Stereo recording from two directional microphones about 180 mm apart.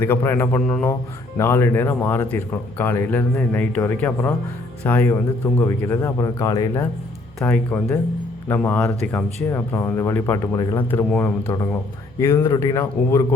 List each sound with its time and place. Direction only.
0.0 s speech: 15° left (ahead or behind)